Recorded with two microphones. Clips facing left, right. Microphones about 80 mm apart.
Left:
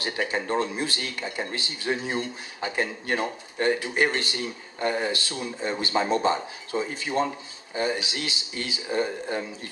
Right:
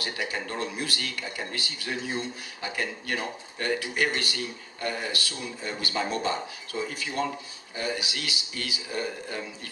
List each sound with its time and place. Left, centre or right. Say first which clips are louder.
0.0 s speech: left 4 dB; left